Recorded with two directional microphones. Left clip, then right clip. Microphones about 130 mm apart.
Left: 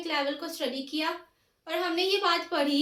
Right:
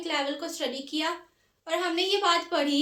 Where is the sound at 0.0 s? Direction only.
30° right (ahead or behind).